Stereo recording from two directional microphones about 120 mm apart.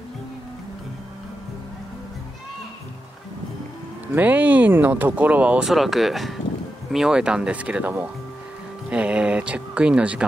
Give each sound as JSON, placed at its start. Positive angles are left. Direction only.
{"t": 4.1, "sound": "speech", "side_deg": -15}